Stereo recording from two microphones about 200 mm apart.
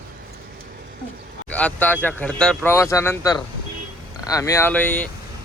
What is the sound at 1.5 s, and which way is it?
Speech, 10° left (ahead or behind).